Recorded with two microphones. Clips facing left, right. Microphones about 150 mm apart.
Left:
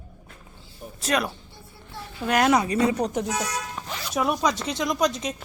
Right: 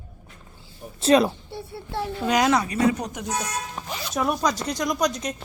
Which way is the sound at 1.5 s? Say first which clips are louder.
Right 11 dB; 70° right (ahead or behind).